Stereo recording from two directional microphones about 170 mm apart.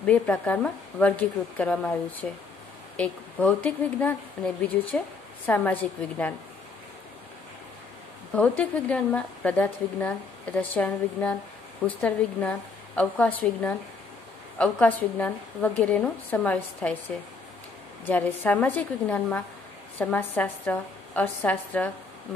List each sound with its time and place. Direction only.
0.0 s a woman's voice: 10° left (ahead or behind)
8.4 s a woman's voice: 10° left (ahead or behind)
18.0 s a woman's voice: 10° left (ahead or behind)